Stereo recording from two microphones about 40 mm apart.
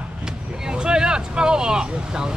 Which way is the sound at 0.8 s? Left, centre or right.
Right.